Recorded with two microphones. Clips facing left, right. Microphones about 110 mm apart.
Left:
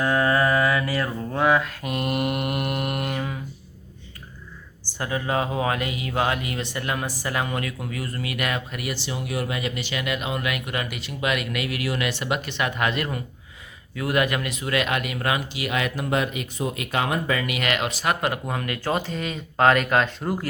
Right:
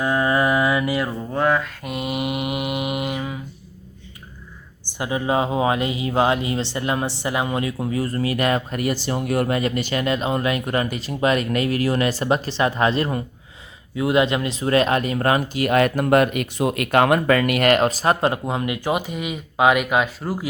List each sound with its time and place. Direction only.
0.0 s mantra: 15° right (ahead or behind)
1.3 s mantra: centre (ahead or behind)
4.9 s speech: 15° right (ahead or behind)